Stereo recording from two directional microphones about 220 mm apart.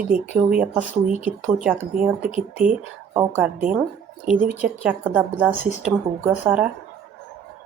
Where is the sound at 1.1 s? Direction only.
30° left (ahead or behind).